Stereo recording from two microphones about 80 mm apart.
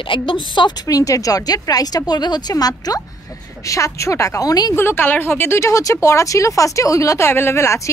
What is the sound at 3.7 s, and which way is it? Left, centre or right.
Speech, left.